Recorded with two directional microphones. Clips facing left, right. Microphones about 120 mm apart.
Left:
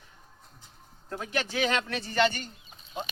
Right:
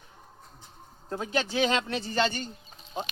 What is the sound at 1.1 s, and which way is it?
Speech, 30° right (ahead or behind).